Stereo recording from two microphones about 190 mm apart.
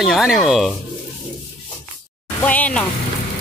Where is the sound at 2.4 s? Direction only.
5° left (ahead or behind).